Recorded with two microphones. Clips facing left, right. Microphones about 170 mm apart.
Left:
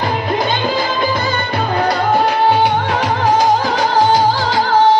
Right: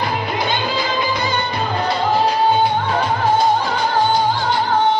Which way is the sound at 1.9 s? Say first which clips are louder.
Left 1 dB; 65° left (ahead or behind).